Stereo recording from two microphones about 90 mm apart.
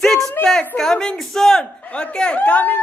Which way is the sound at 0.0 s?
5° left (ahead or behind).